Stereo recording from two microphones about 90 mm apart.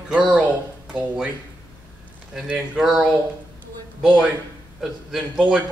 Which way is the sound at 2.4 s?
10° right (ahead or behind).